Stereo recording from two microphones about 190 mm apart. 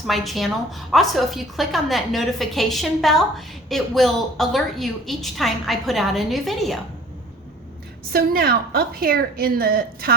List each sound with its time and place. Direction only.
0.1 s a woman's voice: centre (ahead or behind)
8.1 s a woman's voice: 55° right (ahead or behind)